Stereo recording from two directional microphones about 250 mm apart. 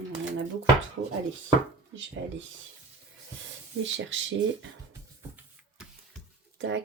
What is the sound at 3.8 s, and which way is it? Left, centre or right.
Speech, right.